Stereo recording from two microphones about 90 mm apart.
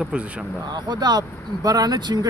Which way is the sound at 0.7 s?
50° right (ahead or behind).